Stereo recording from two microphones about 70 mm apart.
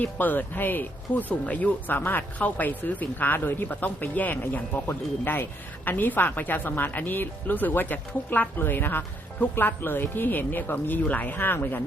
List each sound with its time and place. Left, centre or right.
0.0 s speech: left